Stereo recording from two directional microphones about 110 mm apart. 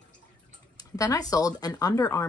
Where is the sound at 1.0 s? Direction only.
30° left (ahead or behind).